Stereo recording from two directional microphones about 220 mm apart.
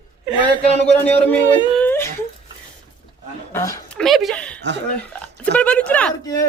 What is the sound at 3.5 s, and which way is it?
Speech, 15° left (ahead or behind).